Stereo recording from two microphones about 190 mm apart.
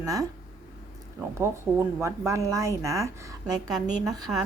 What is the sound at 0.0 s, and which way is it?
Speech, 20° right (ahead or behind).